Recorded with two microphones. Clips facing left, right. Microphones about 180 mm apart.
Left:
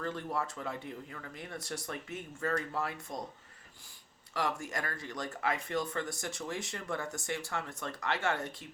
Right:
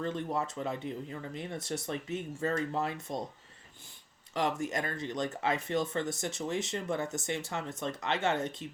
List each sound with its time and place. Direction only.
0.0 s speech: 20° right (ahead or behind)
4.4 s speech: 20° right (ahead or behind)